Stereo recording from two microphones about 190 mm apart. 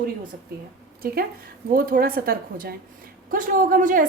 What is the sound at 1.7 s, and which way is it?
A woman's voice, 50° right (ahead or behind).